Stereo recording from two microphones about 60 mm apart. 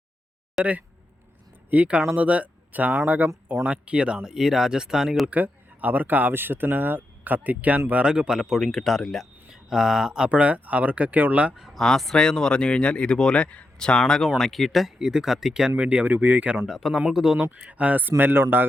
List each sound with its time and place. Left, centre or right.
0.6 s speech: right; by 5.2 s centre
5.2 s speech: right
8.1 s speech: centre
8.6 s speech: centre; by 11.5 s right
11.5 s speech: centre
11.8 s speech: centre
15.8 s speech: right
16.6 s speech: centre
17.4 s speech: right